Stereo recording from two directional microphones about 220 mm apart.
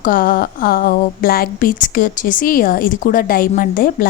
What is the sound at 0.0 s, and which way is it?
A woman's voice, 40° left (ahead or behind).